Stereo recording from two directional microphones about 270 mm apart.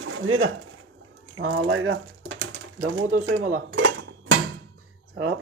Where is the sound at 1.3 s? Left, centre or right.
Right.